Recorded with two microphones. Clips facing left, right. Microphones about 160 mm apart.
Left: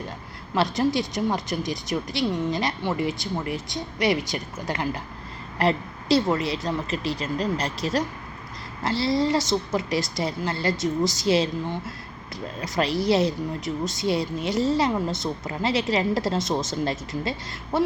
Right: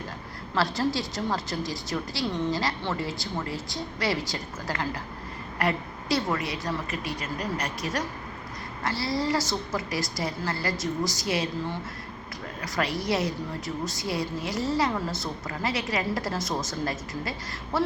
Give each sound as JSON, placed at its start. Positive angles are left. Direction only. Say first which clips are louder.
{"t": 0.5, "sound": "a woman's voice", "louder": "left 4 dB", "side_deg": 20}